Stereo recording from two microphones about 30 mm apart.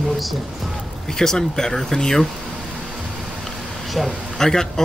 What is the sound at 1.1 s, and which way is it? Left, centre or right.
Speech, centre.